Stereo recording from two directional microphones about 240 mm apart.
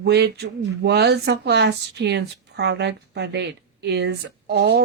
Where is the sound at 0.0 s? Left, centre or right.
Right.